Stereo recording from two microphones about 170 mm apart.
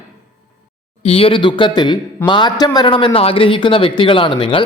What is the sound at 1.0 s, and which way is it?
Speech, 35° left (ahead or behind).